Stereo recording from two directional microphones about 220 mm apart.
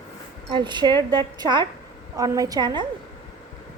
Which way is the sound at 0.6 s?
20° right (ahead or behind).